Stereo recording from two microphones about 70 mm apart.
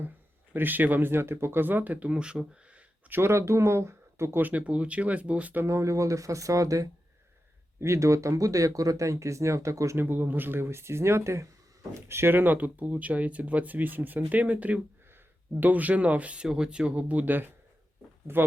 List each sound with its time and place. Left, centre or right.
0.5 s speech: right
3.1 s speech: right
4.4 s speech: right
5.6 s speech: right
10.0 s speech: right